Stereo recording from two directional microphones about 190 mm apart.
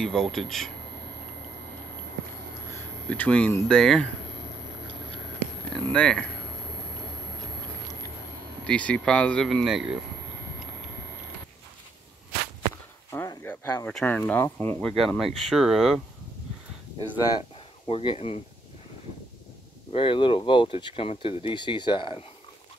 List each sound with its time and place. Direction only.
0.0 s speech: centre (ahead or behind)
3.1 s speech: 5° left (ahead or behind)
5.9 s speech: 5° left (ahead or behind)
8.6 s speech: 5° left (ahead or behind)
13.1 s speech: 15° left (ahead or behind); by 16.0 s centre (ahead or behind)
17.4 s speech: 30° left (ahead or behind)
19.9 s speech: 25° left (ahead or behind)